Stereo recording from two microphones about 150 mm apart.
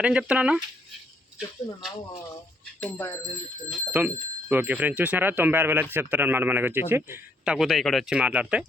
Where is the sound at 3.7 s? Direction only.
10° right (ahead or behind).